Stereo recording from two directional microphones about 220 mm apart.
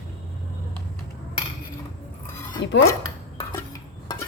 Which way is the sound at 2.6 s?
50° left (ahead or behind).